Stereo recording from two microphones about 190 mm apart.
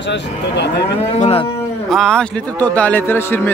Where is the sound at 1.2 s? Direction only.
30° left (ahead or behind).